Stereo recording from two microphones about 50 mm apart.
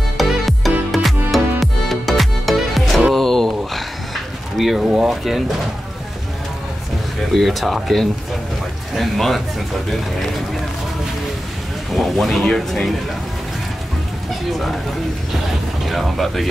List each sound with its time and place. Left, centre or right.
0.2 s music: centre
3.0 s a sound: centre
4.8 s speech: centre
5.1 s speech: centre
7.3 s speech: centre
11.9 s speech: centre
15.9 s speech: centre